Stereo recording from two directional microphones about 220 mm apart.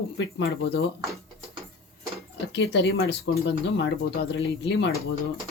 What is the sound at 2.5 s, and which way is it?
Speech, 55° left (ahead or behind).